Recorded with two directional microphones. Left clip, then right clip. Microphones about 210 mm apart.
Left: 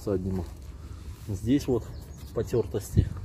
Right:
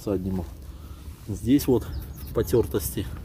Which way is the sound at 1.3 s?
25° right (ahead or behind).